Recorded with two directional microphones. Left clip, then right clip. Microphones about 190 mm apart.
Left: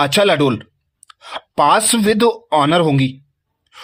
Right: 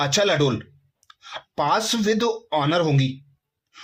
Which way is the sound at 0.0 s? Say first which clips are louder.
Left 7 dB; 40° left (ahead or behind).